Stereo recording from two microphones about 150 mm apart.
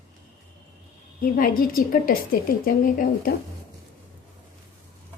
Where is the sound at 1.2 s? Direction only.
70° left (ahead or behind).